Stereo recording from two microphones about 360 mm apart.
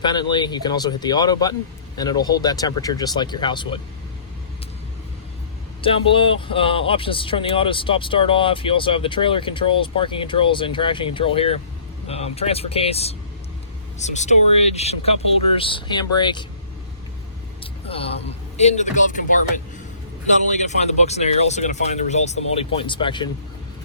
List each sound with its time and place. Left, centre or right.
0.0 s speech: centre
5.8 s speech: centre
17.6 s speech: centre